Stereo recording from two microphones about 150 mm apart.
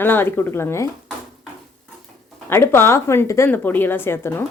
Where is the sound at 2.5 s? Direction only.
15° left (ahead or behind).